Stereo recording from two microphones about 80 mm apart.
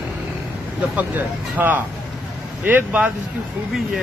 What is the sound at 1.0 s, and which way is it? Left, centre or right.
Speech, right.